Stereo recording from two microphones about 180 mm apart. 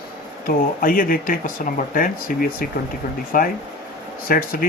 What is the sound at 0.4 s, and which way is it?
Speech, 50° left (ahead or behind).